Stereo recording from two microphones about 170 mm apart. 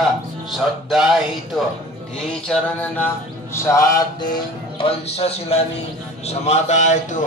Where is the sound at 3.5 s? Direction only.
15° left (ahead or behind).